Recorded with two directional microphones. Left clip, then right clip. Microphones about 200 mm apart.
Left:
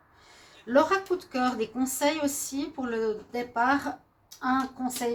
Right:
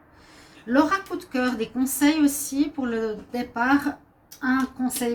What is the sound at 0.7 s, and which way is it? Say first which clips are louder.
A woman's voice: right 1 dB; 45° left (ahead or behind).